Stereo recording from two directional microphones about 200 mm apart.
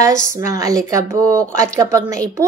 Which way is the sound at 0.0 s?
15° right (ahead or behind).